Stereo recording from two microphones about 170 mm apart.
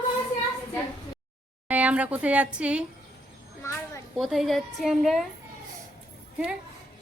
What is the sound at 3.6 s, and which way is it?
Speech, 15° left (ahead or behind).